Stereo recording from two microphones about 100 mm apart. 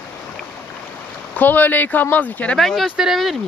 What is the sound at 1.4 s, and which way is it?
Speech, 20° left (ahead or behind).